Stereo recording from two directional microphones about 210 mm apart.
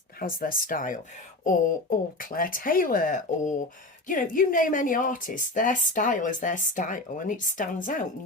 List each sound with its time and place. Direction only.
0.2 s a woman's voice: 45° left (ahead or behind)
2.1 s a woman's voice: 40° left (ahead or behind)